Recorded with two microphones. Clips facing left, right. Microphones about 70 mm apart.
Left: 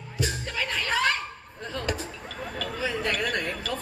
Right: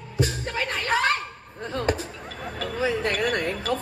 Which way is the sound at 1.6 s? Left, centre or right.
Right.